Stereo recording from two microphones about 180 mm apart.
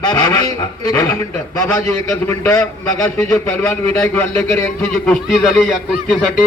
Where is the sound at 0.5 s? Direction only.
15° left (ahead or behind).